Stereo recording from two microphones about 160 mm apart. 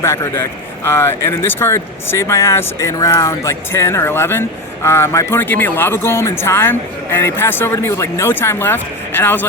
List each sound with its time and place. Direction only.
0.0 s speech: 15° left (ahead or behind)